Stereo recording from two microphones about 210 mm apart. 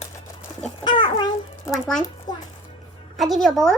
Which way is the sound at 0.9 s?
20° left (ahead or behind).